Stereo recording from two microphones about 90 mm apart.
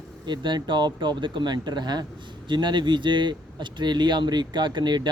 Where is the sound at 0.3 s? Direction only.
60° right (ahead or behind).